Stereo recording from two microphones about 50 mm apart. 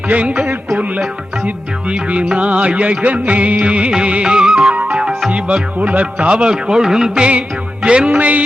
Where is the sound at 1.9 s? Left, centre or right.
Right.